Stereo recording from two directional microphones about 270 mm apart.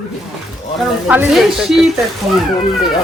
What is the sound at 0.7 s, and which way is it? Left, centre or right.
Speech, centre.